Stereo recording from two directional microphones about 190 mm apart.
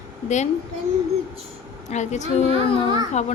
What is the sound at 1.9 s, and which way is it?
Speech, 35° left (ahead or behind).